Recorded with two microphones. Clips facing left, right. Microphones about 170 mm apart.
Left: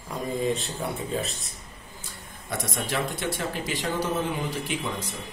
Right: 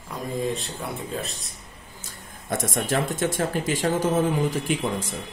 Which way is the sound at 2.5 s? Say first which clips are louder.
Right 4 dB; 45° right (ahead or behind).